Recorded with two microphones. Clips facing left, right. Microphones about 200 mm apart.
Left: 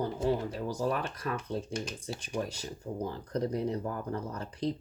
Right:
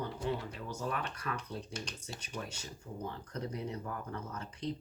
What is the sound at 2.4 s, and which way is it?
Speech, 35° left (ahead or behind).